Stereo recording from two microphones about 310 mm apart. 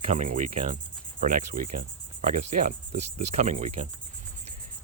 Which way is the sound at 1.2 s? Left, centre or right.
Right.